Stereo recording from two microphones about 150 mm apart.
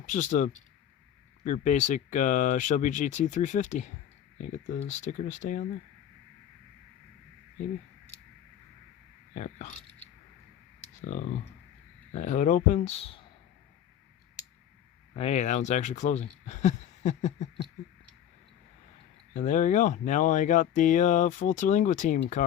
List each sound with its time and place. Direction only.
0.0 s speech: 55° left (ahead or behind)
9.3 s speech: 55° left (ahead or behind)
11.0 s speech: 55° left (ahead or behind)
15.1 s speech: 45° left (ahead or behind)
19.3 s speech: 55° left (ahead or behind)